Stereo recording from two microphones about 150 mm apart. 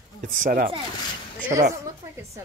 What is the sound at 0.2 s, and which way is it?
Speech, 65° right (ahead or behind).